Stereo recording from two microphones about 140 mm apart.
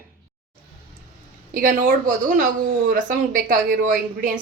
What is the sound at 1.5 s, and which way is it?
Speech, 75° right (ahead or behind).